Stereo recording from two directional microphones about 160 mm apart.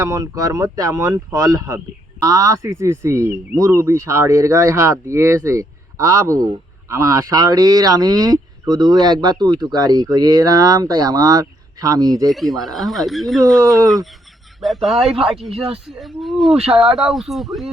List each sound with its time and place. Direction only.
0.0 s speech: 20° right (ahead or behind)
12.3 s speech: centre (ahead or behind)